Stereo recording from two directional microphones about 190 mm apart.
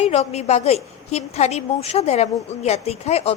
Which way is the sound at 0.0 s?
35° left (ahead or behind).